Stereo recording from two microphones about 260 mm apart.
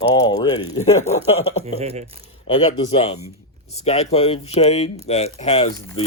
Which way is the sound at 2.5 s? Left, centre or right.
Left.